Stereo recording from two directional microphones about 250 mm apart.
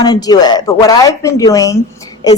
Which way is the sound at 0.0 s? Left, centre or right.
Centre.